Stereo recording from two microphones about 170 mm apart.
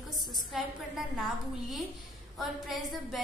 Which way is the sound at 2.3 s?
Centre (ahead or behind).